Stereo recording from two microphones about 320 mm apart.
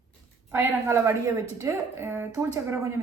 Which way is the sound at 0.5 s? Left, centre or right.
Centre.